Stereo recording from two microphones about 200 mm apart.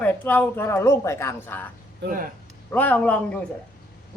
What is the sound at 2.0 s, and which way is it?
Speech, 55° right (ahead or behind).